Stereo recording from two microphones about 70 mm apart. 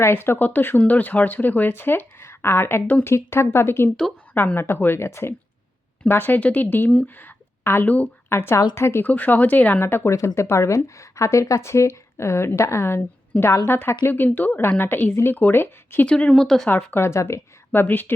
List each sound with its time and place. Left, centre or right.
0.0 s speech: left
2.8 s speech: left
3.1 s a woman's voice: left
6.1 s speech: left
7.0 s a sound: left
7.9 s speech: left
8.3 s a woman's voice: left
9.0 s speech: left
10.2 s speech: left
13.3 s speech: centre
13.7 s speech: left
16.0 s speech: centre
16.6 s a woman's voice: left
17.7 s speech: left